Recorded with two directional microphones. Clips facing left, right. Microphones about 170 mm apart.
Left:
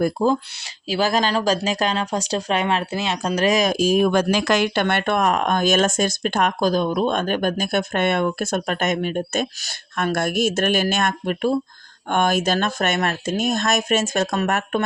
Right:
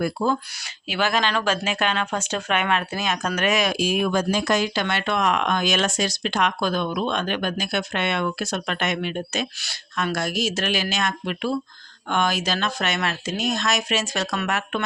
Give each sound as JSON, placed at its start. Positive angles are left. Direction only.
{"t": 0.6, "sound": "speech", "side_deg": 35}
{"t": 4.1, "sound": "speech", "side_deg": 70}